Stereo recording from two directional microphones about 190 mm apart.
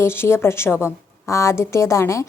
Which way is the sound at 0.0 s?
10° left (ahead or behind).